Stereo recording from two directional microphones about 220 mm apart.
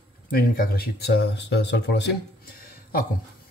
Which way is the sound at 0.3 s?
45° left (ahead or behind).